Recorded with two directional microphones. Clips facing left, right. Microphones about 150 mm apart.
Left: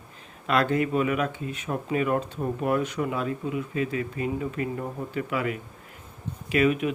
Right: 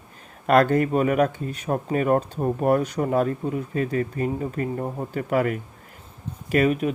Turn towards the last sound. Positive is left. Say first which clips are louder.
# right 2 dB
turn(degrees=-40)  # may be behind; listen again after turning